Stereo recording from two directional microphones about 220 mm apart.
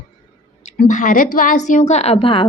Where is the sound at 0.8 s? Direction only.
35° left (ahead or behind).